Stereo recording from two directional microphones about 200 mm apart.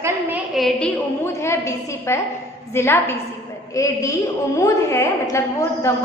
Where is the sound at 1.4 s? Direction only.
15° left (ahead or behind).